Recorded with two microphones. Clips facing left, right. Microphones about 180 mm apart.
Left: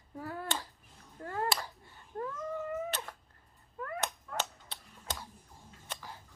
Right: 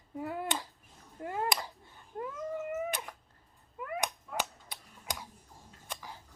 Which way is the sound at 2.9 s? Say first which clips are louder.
Right 1 dB; 10° right (ahead or behind).